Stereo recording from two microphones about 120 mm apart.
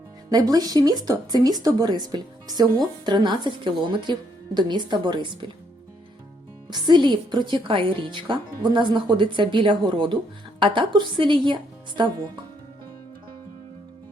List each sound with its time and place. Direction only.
0.3 s speech: 35° right (ahead or behind)
6.7 s a woman's voice: 40° right (ahead or behind)